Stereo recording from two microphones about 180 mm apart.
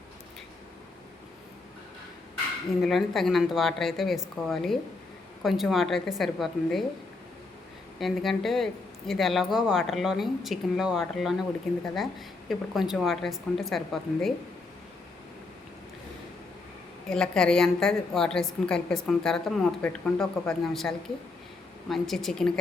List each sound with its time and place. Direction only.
2.8 s speech: centre (ahead or behind)
7.9 s speech: centre (ahead or behind)
17.1 s speech: 5° left (ahead or behind)